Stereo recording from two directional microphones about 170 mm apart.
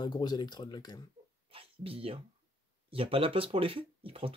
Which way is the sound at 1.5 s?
35° right (ahead or behind).